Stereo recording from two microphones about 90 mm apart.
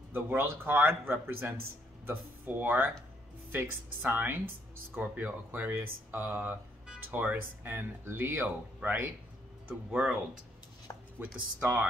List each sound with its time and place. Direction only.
0.1 s speech: 20° right (ahead or behind)
11.3 s speech: 15° right (ahead or behind)